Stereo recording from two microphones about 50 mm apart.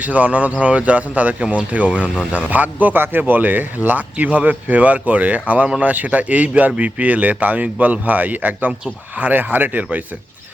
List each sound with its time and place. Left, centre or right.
0.0 s speech: right